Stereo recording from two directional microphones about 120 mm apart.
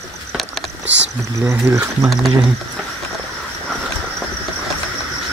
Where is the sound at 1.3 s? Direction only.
25° right (ahead or behind).